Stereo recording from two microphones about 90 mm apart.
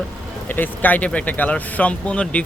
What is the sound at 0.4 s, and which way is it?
Speech, 20° left (ahead or behind).